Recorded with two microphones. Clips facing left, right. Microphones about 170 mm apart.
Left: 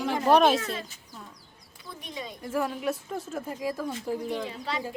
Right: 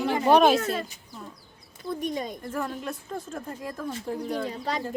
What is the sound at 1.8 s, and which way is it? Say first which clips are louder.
Speech: right 9 dB; 45° right (ahead or behind).